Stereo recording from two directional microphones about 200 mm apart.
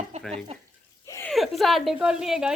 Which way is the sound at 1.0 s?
15° left (ahead or behind).